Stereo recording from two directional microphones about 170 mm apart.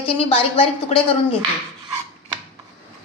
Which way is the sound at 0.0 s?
35° left (ahead or behind).